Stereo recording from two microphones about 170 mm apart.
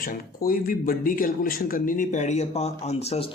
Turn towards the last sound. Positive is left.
turn(degrees=35)  # may be behind; listen again after turning